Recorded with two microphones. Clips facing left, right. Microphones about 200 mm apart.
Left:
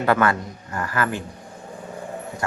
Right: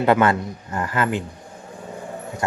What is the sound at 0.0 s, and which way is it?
Speech, 20° right (ahead or behind).